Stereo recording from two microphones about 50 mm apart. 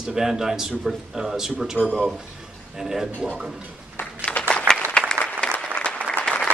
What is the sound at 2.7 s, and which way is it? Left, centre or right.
Speech, centre.